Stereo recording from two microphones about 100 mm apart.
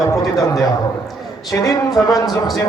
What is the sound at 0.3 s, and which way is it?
A man's voice, 35° left (ahead or behind).